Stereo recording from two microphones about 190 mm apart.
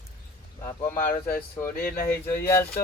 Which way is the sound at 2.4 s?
10° left (ahead or behind).